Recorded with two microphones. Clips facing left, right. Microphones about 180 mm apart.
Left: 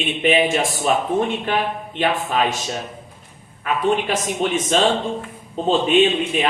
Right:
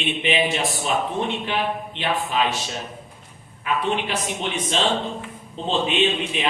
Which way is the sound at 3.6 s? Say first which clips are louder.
Left 4 dB; 45° left (ahead or behind).